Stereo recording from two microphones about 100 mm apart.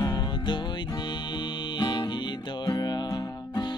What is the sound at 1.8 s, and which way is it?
Music, 45° left (ahead or behind).